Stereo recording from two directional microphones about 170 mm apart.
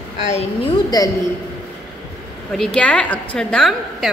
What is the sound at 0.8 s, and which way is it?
Speech, 20° left (ahead or behind).